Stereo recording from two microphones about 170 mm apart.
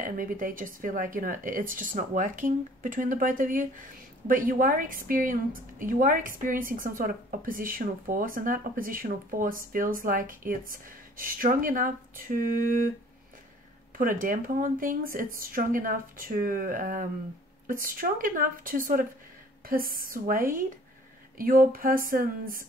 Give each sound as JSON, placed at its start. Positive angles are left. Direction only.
{"t": 0.0, "sound": "a woman's voice", "side_deg": -55}
{"t": 13.9, "sound": "a woman's voice", "side_deg": -55}